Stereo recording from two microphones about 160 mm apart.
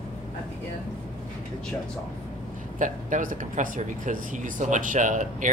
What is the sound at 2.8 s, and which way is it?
A man's voice, 55° right (ahead or behind).